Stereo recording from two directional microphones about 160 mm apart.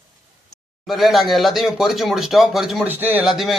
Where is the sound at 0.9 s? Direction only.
Centre (ahead or behind).